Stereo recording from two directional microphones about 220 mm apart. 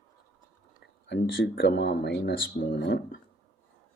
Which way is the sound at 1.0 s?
50° left (ahead or behind).